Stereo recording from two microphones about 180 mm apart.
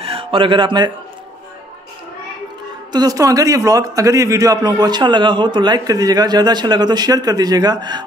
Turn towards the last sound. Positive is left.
turn(degrees=-25)  # may be behind; listen again after turning